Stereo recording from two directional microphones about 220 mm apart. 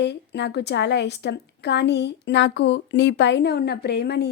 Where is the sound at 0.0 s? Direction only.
50° left (ahead or behind).